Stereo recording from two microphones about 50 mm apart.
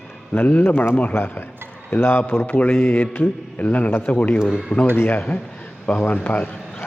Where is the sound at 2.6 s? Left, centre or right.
Left.